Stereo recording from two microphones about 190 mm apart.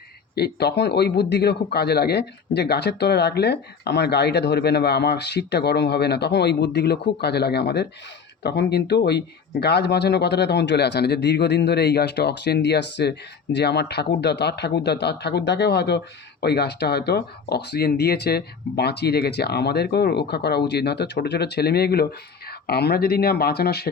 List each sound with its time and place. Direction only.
0.3 s a man's voice: 60° left (ahead or behind)